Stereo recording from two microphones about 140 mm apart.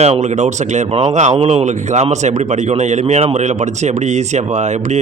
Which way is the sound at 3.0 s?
45° right (ahead or behind).